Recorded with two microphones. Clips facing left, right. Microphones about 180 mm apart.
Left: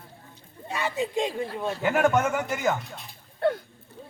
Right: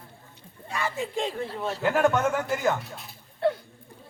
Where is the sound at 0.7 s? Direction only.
20° left (ahead or behind).